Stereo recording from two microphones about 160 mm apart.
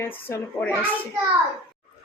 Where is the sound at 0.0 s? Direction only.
15° left (ahead or behind).